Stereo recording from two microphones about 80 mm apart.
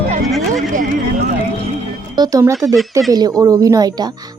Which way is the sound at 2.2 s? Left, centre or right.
Right.